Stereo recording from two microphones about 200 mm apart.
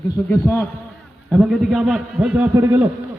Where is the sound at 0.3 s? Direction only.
10° left (ahead or behind).